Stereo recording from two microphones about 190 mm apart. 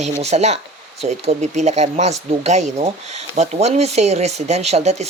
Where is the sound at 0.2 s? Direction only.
35° right (ahead or behind).